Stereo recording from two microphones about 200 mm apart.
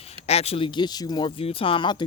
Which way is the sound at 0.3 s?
30° left (ahead or behind).